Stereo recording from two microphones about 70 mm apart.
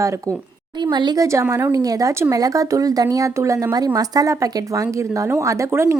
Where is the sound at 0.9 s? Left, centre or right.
Right.